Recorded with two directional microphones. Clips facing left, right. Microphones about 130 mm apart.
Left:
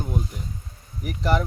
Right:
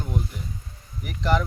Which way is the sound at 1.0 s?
40° left (ahead or behind).